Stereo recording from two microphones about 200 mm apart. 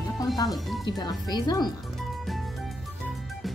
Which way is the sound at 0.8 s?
20° left (ahead or behind).